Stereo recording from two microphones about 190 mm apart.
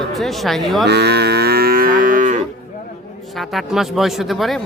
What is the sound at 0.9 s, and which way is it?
Livestock, 60° right (ahead or behind).